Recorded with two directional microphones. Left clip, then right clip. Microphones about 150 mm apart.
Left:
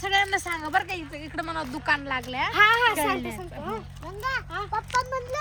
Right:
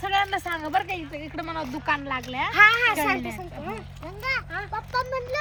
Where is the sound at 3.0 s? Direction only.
35° left (ahead or behind).